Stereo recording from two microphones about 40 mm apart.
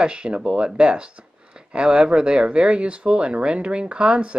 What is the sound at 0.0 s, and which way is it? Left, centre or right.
Speech, right.